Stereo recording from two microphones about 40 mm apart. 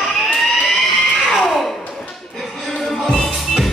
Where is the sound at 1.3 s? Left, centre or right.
Centre.